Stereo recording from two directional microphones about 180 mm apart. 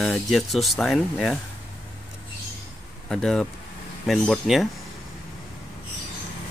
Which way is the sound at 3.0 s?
5° left (ahead or behind).